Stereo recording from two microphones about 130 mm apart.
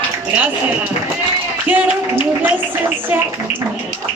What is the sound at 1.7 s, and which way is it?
Speech, 15° right (ahead or behind).